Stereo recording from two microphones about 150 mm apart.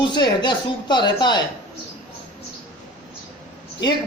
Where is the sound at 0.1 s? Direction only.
30° left (ahead or behind).